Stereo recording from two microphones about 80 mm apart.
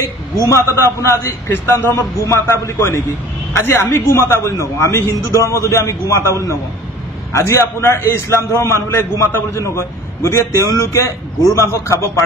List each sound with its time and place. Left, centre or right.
0.5 s a man's voice: left